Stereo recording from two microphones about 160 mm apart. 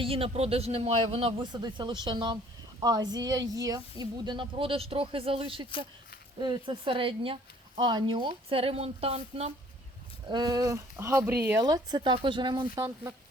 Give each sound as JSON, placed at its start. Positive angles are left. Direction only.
{"t": 0.0, "sound": "a man's voice", "side_deg": -35}
{"t": 10.2, "sound": "a woman's voice", "side_deg": -25}